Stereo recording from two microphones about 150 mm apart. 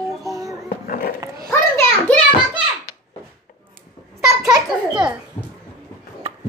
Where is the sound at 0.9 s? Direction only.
65° left (ahead or behind).